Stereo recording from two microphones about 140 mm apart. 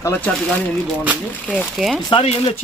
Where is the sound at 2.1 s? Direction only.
40° left (ahead or behind).